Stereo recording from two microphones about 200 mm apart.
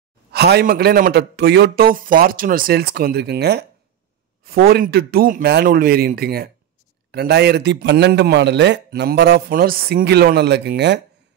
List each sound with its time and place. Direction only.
0.3 s a man's voice: 55° right (ahead or behind)